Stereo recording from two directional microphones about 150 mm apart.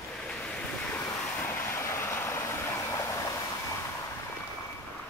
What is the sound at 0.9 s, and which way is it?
Vehicle, 15° left (ahead or behind).